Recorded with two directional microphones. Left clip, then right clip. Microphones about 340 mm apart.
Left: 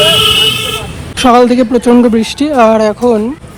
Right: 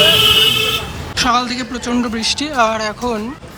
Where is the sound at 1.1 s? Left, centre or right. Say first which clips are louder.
Left 9 dB; centre.